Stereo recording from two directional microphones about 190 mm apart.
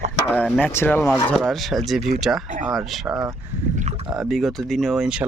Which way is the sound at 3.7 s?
35° right (ahead or behind).